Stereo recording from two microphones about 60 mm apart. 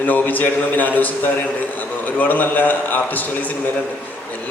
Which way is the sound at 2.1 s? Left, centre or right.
Left.